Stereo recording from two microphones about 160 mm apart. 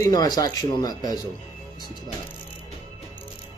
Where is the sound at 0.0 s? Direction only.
25° left (ahead or behind).